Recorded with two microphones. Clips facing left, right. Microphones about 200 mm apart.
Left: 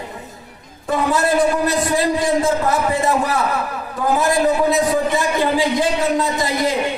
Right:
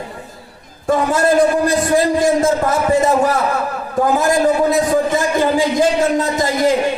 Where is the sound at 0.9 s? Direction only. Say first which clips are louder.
Right 3 dB; 45° right (ahead or behind).